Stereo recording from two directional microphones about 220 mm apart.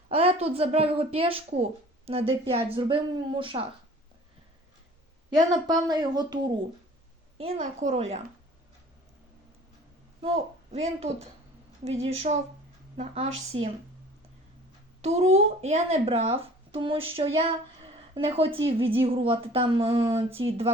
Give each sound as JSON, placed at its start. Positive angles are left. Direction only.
{"t": 0.1, "sound": "a woman's voice", "side_deg": -25}
{"t": 5.3, "sound": "a woman's voice", "side_deg": -20}
{"t": 7.3, "sound": "a woman's voice", "side_deg": -30}
{"t": 10.7, "sound": "a woman's voice", "side_deg": -30}
{"t": 15.0, "sound": "a woman's voice", "side_deg": -30}